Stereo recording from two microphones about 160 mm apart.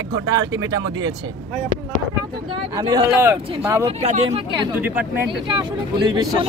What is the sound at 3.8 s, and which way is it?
Speech, 40° right (ahead or behind).